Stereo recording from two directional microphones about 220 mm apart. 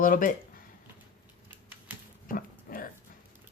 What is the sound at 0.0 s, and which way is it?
Speech, 40° left (ahead or behind).